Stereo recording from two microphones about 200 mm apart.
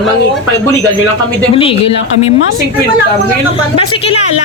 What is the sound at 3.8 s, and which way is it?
Speech, 30° left (ahead or behind).